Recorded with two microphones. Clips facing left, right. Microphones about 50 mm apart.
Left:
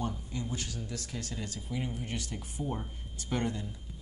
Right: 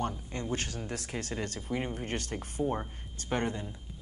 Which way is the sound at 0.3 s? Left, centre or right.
Right.